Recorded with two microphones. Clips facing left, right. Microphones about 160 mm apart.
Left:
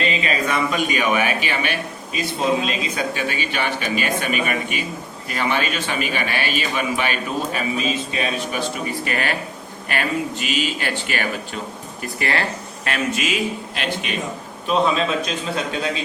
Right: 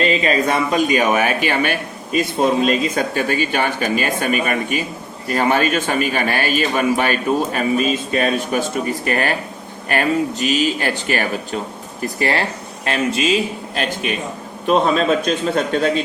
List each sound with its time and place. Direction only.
0.0 s a man's voice: 35° right (ahead or behind)
14.7 s a man's voice: 45° right (ahead or behind)